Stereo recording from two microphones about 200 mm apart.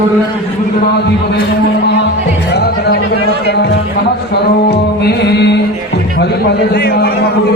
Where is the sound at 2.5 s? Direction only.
55° left (ahead or behind).